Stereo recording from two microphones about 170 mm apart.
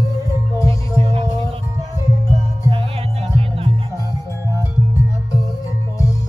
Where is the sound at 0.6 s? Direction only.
20° left (ahead or behind).